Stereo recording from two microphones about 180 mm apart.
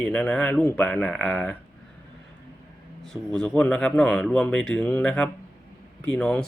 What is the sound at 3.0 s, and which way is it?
Speech, 5° left (ahead or behind).